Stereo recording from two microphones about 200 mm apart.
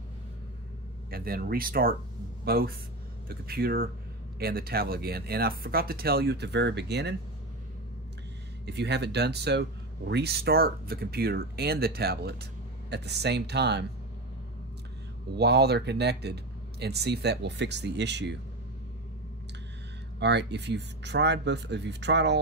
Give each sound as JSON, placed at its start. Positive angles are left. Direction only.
{"t": 1.1, "sound": "speech", "side_deg": -50}
{"t": 8.6, "sound": "speech", "side_deg": -55}
{"t": 15.3, "sound": "speech", "side_deg": -55}
{"t": 20.2, "sound": "speech", "side_deg": -60}